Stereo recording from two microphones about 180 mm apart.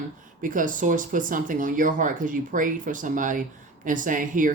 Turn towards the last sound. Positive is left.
turn(degrees=-50)  # may be behind; listen again after turning